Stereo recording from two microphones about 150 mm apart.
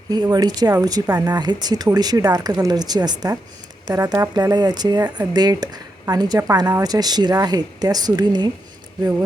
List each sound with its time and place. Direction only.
0.1 s speech: 25° right (ahead or behind)